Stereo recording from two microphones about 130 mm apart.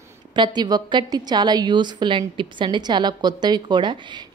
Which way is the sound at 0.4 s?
35° right (ahead or behind).